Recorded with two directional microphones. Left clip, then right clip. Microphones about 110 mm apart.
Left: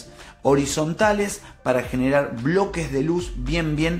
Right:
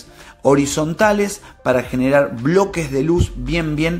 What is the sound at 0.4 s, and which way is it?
Speech, 30° right (ahead or behind).